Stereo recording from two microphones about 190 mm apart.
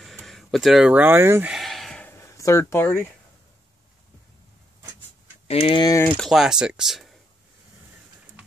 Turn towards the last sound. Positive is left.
turn(degrees=0)  # may be behind; listen again after turning